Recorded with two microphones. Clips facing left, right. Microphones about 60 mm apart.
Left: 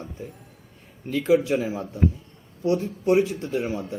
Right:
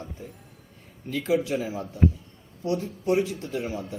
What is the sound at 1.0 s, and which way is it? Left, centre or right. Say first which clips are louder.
Speech: left 5 dB; left.